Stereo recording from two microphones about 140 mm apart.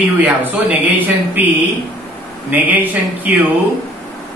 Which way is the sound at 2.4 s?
10° right (ahead or behind).